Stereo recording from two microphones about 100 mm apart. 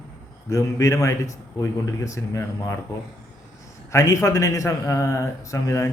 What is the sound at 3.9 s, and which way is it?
A man's voice, 30° left (ahead or behind).